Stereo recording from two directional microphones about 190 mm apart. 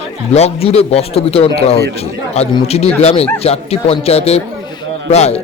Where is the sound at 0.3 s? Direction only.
35° left (ahead or behind).